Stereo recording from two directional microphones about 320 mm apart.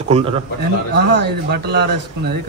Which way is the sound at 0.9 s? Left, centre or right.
Right.